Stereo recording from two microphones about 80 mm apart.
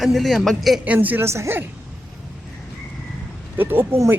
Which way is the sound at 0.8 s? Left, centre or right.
Centre.